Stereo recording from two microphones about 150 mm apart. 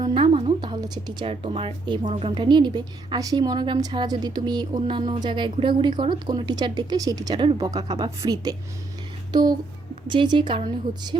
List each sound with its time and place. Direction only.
0.0 s music: 35° right (ahead or behind)
0.6 s a woman's voice: 30° right (ahead or behind)
1.2 s a woman's voice: 40° right (ahead or behind)